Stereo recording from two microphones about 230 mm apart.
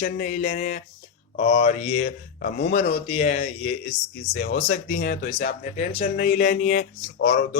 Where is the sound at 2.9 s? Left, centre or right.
Left.